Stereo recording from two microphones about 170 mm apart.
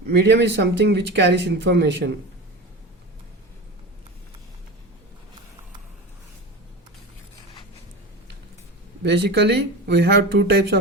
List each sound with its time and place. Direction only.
0.1 s speech: 90° right
9.0 s speech: 80° right